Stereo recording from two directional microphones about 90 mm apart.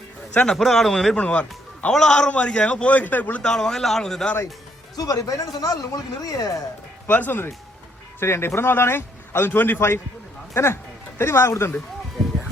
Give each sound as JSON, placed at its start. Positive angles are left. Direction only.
{"t": 0.3, "sound": "a man's voice", "side_deg": 5}
{"t": 3.4, "sound": "a man's voice", "side_deg": 5}
{"t": 4.9, "sound": "speech", "side_deg": 40}
{"t": 7.1, "sound": "a man's voice", "side_deg": 20}